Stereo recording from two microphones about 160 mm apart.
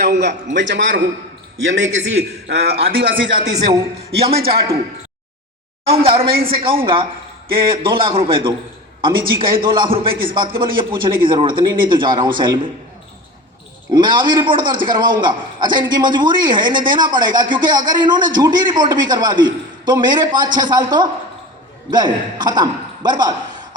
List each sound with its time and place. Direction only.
0.0 s a man's voice: 90° right
2.8 s a man's voice: 70° right (ahead or behind)
4.3 s a man's voice: 35° right (ahead or behind)
5.8 s a man's voice: 35° right (ahead or behind)
6.3 s a man's voice: 70° right (ahead or behind)
6.6 s a man's voice: 30° right (ahead or behind)
13.9 s a man's voice: 30° right (ahead or behind)